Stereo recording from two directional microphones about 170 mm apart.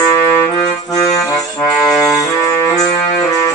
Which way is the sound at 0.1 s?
15° left (ahead or behind).